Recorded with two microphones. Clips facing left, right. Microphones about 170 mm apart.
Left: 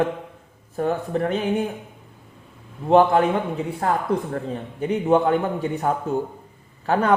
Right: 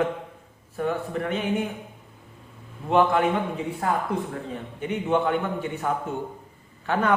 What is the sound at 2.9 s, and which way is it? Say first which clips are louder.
Speech: left 5 dB; 35° left (ahead or behind).